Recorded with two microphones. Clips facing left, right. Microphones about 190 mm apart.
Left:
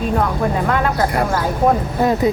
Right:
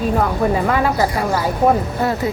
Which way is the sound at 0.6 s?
5° right (ahead or behind).